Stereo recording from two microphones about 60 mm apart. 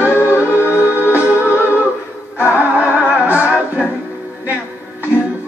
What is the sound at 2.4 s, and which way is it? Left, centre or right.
Singing, right.